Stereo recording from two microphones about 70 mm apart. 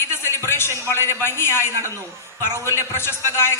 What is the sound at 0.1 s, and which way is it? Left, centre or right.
A man's voice, left.